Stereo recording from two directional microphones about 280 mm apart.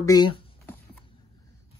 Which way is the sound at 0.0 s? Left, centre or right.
Centre.